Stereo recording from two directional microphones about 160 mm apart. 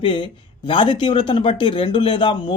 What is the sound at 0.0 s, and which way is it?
Speech, 30° left (ahead or behind).